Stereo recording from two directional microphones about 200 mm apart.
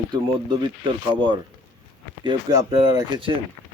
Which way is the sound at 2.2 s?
20° right (ahead or behind).